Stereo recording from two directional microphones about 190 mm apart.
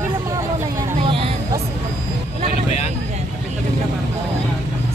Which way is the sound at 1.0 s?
30° right (ahead or behind).